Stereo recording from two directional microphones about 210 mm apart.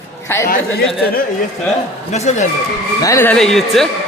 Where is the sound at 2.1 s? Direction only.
35° left (ahead or behind).